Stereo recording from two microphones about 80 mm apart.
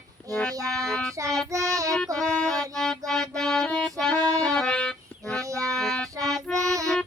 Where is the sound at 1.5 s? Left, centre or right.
Right.